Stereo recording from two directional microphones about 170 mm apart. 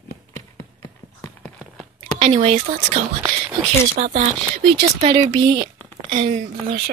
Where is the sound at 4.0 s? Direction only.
50° right (ahead or behind).